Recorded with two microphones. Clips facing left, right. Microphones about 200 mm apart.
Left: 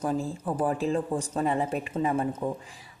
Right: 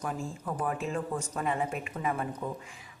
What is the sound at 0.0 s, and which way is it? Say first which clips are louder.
A woman's voice: left 7 dB; 35° left (ahead or behind).